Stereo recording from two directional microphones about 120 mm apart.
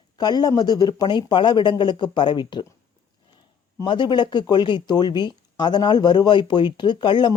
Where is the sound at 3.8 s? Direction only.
40° left (ahead or behind).